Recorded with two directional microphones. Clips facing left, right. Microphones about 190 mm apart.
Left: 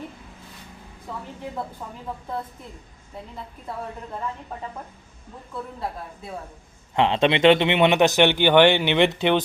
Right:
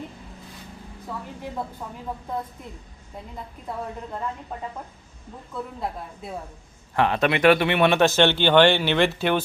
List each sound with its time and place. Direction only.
6.9 s speech: 20° left (ahead or behind)